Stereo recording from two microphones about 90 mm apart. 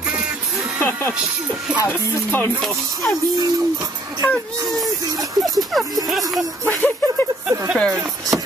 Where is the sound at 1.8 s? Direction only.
20° left (ahead or behind).